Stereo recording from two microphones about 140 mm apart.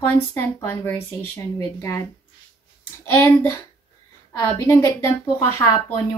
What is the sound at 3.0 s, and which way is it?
A woman's voice, 15° left (ahead or behind).